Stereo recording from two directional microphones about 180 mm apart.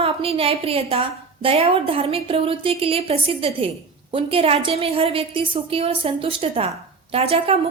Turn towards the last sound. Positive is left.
turn(degrees=-35)  # may be behind; listen again after turning